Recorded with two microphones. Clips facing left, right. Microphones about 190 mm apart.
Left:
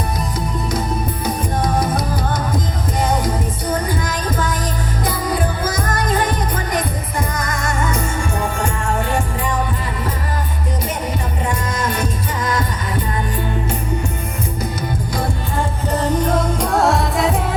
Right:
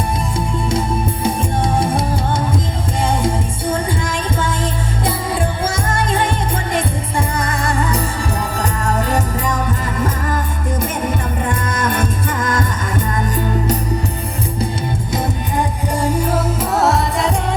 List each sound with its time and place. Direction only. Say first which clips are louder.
1.2 s music: right 1 dB; 25° right (ahead or behind)
5.0 s music: even; 25° right (ahead or behind)
11.4 s music: right 1 dB; 50° right (ahead or behind)
15.1 s music: right 4 dB; 20° right (ahead or behind); by 17.5 s centre (ahead or behind)